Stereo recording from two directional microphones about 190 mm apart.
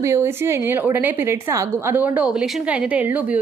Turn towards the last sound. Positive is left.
turn(degrees=-10)  # may be behind; listen again after turning